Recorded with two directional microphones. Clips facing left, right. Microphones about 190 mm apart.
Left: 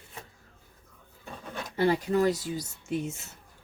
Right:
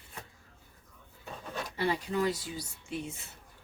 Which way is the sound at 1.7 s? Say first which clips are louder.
Left 7 dB; 45° left (ahead or behind).